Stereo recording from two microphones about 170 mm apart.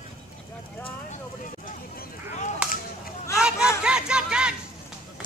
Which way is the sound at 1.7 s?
50° left (ahead or behind).